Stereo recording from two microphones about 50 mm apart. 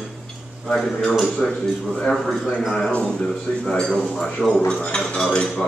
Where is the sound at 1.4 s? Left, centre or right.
Centre.